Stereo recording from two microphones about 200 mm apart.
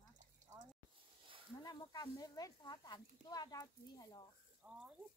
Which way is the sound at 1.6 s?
20° left (ahead or behind).